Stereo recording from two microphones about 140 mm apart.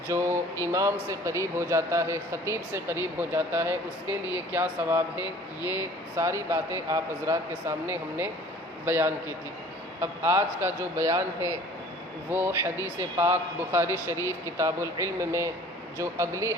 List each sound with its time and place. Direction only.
0.1 s a man's voice: 20° right (ahead or behind)